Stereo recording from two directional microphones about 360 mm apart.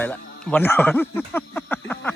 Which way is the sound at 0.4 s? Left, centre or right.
Centre.